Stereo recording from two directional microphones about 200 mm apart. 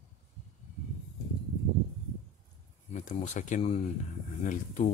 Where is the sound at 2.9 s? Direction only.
40° left (ahead or behind).